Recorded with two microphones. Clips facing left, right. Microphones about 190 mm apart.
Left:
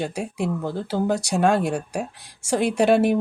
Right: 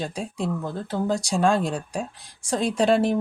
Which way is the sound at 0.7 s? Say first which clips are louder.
Left 3 dB; 75° left (ahead or behind).